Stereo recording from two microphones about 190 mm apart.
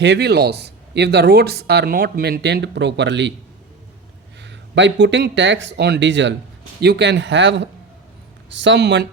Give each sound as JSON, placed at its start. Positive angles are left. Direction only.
{"t": 0.0, "sound": "speech", "side_deg": -65}
{"t": 4.4, "sound": "speech", "side_deg": -70}